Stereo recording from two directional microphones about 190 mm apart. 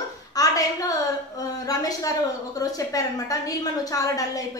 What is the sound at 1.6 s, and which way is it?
A woman's voice, 20° left (ahead or behind).